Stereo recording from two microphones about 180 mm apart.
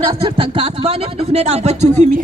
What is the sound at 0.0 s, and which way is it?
Speech, 25° right (ahead or behind).